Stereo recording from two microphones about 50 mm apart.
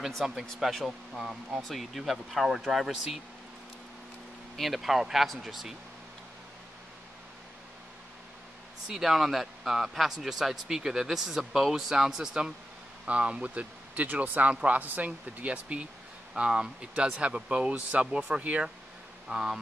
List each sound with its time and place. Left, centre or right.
0.2 s speech: centre
4.6 s speech: centre
8.8 s a man's voice: centre
13.0 s speech: right
14.0 s speech: right
19.2 s speech: centre